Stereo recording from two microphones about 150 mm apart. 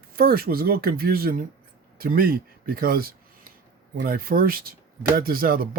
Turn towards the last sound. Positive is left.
turn(degrees=-75)  # may be behind; listen again after turning